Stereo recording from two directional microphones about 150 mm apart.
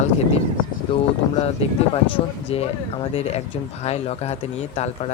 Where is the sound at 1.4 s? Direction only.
40° left (ahead or behind).